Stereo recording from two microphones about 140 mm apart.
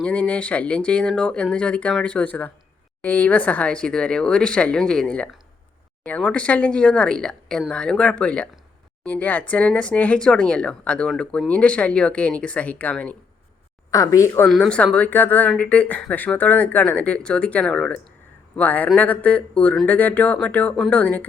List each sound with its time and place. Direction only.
0.0 s speech: 10° left (ahead or behind)
13.9 s a woman's voice: 25° left (ahead or behind)
14.5 s speech: 5° left (ahead or behind)